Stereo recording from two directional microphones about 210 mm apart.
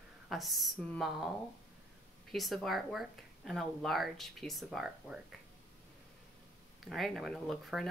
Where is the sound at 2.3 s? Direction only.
Centre (ahead or behind).